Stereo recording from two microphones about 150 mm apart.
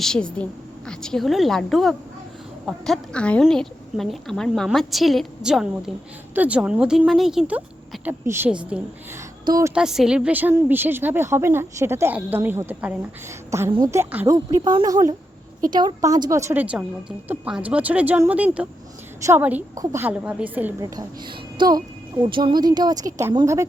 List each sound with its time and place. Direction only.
0.0 s a woman's voice: 5° left (ahead or behind)
9.5 s speech: 20° right (ahead or behind)
9.7 s a woman's voice: 5° right (ahead or behind)
13.7 s a woman's voice: 30° right (ahead or behind)
13.9 s speech: 15° right (ahead or behind)
14.3 s speech: 25° right (ahead or behind)
20.8 s speech: 30° right (ahead or behind)